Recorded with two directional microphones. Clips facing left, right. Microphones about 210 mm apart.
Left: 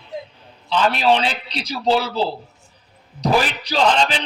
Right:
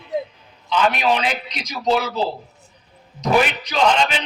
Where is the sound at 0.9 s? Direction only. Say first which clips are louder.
Left 2 dB; 30° left (ahead or behind).